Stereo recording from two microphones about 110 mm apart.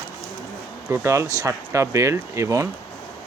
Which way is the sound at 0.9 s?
25° right (ahead or behind).